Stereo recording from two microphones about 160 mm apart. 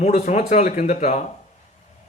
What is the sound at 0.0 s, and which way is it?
A man's voice, 50° left (ahead or behind).